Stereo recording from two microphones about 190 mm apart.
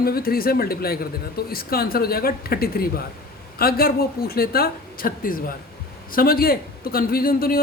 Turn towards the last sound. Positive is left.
turn(degrees=50)  # may be behind; listen again after turning